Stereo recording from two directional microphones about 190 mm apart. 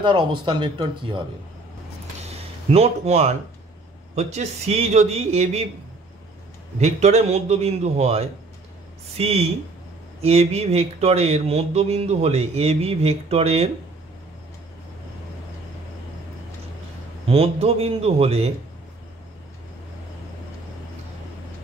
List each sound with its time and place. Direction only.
0.0 s speech: 25° right (ahead or behind)
2.1 s a sound: 35° right (ahead or behind)
4.1 s speech: 35° right (ahead or behind)
6.8 s speech: 35° right (ahead or behind)
17.3 s speech: 30° right (ahead or behind)